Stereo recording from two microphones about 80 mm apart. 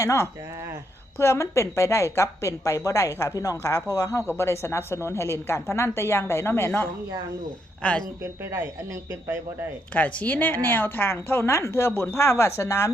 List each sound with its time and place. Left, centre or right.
0.0 s a woman's voice: left
4.4 s a woman's voice: left
7.8 s speech: centre
8.2 s speech: right
9.9 s a woman's voice: centre; by 12.9 s left